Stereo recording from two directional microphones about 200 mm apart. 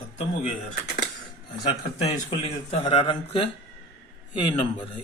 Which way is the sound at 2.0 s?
30° left (ahead or behind).